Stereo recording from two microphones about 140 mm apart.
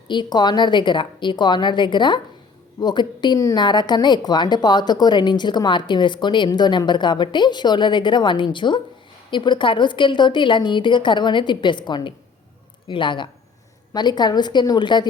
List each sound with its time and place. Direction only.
0.1 s a woman's voice: 30° left (ahead or behind)